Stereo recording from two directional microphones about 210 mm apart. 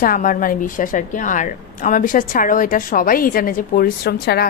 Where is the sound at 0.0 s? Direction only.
40° left (ahead or behind).